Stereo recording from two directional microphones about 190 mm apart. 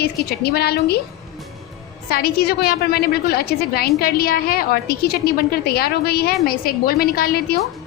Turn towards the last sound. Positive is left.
turn(degrees=55)  # may be behind; listen again after turning